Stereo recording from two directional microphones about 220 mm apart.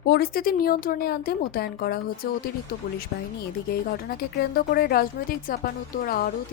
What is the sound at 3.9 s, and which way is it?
Speech, 45° left (ahead or behind).